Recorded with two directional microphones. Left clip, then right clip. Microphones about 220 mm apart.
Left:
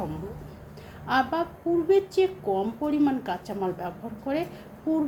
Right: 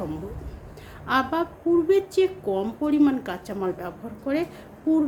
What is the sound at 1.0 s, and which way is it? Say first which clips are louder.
A woman's voice: right 1 dB; 15° right (ahead or behind).